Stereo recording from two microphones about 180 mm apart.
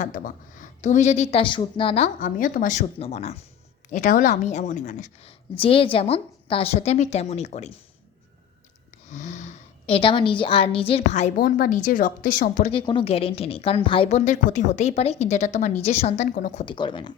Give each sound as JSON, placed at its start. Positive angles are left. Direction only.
{"t": 0.0, "sound": "speech", "side_deg": 45}
{"t": 2.1, "sound": "a woman's voice", "side_deg": 50}
{"t": 5.5, "sound": "speech", "side_deg": 30}
{"t": 9.0, "sound": "speech", "side_deg": 40}
{"t": 12.7, "sound": "speech", "side_deg": 25}
{"t": 16.6, "sound": "speech", "side_deg": 25}